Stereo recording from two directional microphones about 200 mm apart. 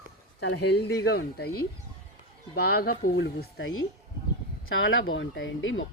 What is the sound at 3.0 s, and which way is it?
Speech, 55° left (ahead or behind).